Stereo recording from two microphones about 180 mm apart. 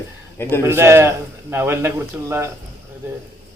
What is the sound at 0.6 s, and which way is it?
A man's voice, 15° right (ahead or behind).